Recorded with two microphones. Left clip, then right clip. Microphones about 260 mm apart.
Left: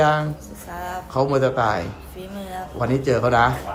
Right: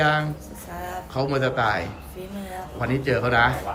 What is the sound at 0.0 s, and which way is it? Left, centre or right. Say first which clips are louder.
Speech: left 3 dB; centre.